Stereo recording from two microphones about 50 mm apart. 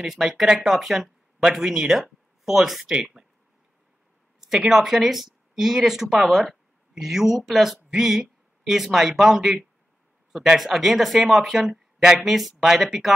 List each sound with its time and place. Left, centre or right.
0.0 s speech: centre
2.9 s speech: centre
4.5 s speech: centre
10.6 s speech: centre